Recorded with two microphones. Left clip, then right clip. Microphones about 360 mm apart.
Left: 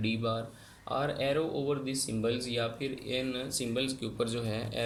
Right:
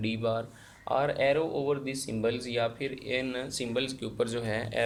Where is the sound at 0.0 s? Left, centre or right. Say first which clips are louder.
Right 2 dB; right.